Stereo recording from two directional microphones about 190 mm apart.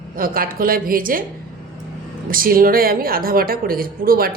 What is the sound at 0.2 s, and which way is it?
A woman's voice, 50° right (ahead or behind).